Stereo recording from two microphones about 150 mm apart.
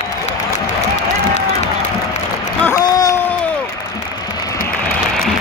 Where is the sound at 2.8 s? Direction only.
25° left (ahead or behind).